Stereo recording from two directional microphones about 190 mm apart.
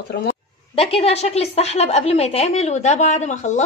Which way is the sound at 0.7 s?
30° left (ahead or behind).